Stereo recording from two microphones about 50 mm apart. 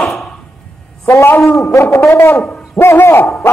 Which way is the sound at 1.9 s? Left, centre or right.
Left.